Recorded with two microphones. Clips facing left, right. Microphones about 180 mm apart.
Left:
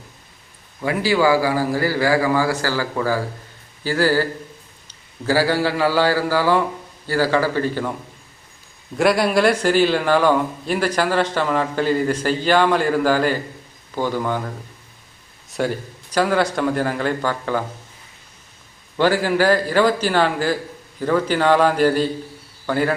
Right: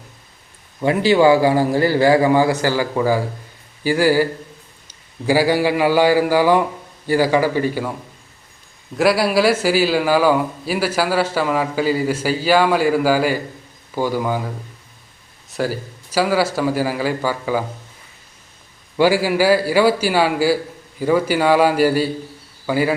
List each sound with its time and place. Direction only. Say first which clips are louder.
0.8 s a man's voice: right 4 dB; 25° right (ahead or behind)
9.0 s a man's voice: right 1 dB; 5° right (ahead or behind)
18.9 s a man's voice: right 2 dB; 10° right (ahead or behind)